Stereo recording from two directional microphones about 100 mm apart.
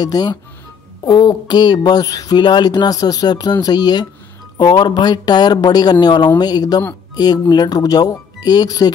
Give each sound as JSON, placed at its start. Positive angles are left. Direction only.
{"t": 0.0, "sound": "speech", "side_deg": 40}